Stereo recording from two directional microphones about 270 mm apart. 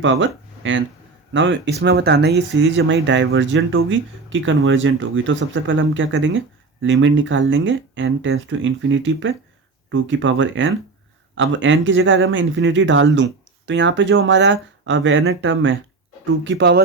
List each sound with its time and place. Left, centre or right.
0.0 s speech: right